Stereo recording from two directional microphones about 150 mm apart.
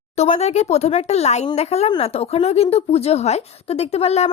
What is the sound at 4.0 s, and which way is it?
Speech, 45° left (ahead or behind).